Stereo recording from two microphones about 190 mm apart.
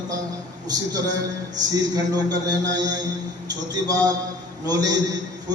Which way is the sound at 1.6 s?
20° right (ahead or behind).